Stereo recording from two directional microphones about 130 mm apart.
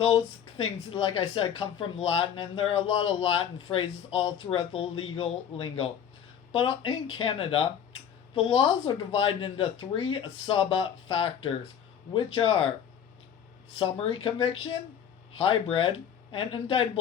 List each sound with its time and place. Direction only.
0.0 s speech: 45° left (ahead or behind)
13.7 s speech: 45° left (ahead or behind)